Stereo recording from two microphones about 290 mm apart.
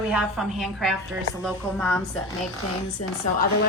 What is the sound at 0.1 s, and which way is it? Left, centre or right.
Speech, centre.